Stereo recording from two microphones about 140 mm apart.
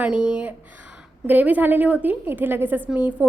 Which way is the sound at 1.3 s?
10° right (ahead or behind).